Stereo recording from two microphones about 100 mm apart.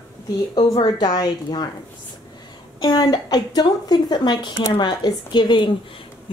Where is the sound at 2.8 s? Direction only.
45° left (ahead or behind).